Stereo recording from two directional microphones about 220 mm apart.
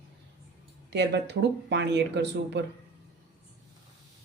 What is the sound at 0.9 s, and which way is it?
Speech, 50° right (ahead or behind).